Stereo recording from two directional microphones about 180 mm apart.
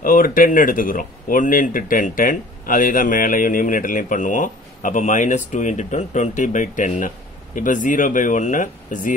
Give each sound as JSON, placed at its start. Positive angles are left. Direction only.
{"t": 0.0, "sound": "speech", "side_deg": 50}